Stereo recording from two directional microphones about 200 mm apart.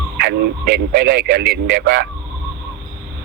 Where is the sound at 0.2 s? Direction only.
55° right (ahead or behind).